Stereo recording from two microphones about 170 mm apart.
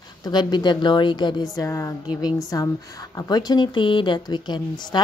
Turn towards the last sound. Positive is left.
turn(degrees=25)  # may be behind; listen again after turning